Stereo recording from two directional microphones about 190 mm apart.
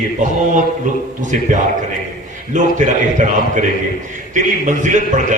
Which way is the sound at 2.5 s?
40° right (ahead or behind).